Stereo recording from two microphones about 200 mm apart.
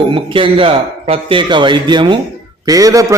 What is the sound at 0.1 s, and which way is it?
A man's voice, 25° right (ahead or behind).